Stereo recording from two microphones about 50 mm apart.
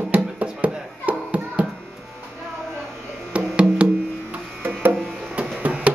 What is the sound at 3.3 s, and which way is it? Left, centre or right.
Music, right.